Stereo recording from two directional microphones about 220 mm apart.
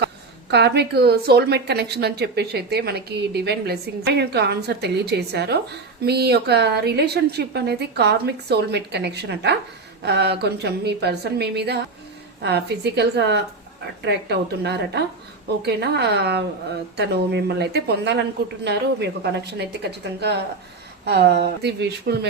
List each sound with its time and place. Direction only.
0.5 s a woman's voice: 50° right (ahead or behind)